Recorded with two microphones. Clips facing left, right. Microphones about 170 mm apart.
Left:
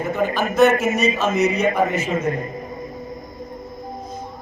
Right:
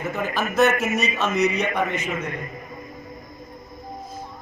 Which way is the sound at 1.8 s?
35° left (ahead or behind).